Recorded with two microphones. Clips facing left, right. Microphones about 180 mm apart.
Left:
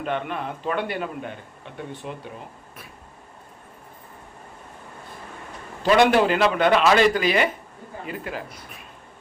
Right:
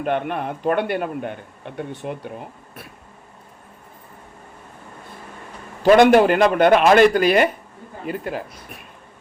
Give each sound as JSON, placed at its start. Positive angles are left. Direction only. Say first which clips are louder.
{"t": 0.0, "sound": "a man's voice", "louder": "right 5 dB", "side_deg": -55}
{"t": 5.8, "sound": "a man's voice", "louder": "right 5 dB", "side_deg": -50}